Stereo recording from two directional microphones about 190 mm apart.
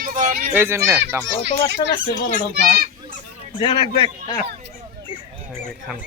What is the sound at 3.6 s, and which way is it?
Speech, 25° left (ahead or behind).